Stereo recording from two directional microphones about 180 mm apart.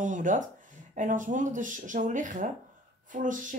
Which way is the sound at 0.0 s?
45° right (ahead or behind).